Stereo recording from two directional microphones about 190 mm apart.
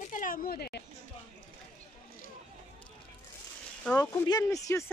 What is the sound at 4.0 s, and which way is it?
Speech, 20° left (ahead or behind).